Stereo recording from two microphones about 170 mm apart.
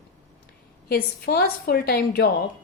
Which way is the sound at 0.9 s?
65° left (ahead or behind).